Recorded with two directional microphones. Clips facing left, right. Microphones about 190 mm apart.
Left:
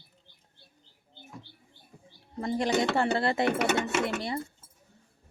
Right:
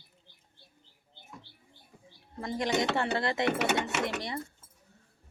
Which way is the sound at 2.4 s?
30° left (ahead or behind).